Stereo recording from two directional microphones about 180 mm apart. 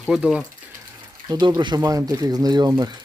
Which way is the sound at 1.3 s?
20° right (ahead or behind).